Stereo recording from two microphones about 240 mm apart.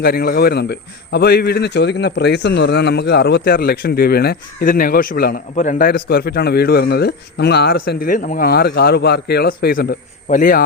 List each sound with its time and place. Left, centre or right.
0.0 s a man's voice: left